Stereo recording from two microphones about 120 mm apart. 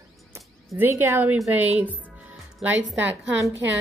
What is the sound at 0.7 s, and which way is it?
A woman's voice, 20° right (ahead or behind).